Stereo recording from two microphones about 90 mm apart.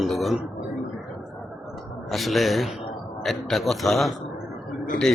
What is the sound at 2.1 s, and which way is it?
A man's voice, centre (ahead or behind).